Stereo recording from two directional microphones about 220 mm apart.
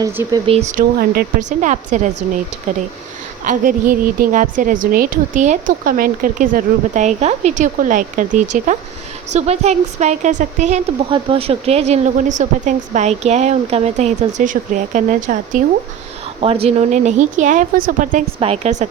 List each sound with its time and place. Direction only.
0.0 s a woman's voice: 15° right (ahead or behind); by 2.1 s 35° right (ahead or behind)
3.4 s a woman's voice: 40° right (ahead or behind)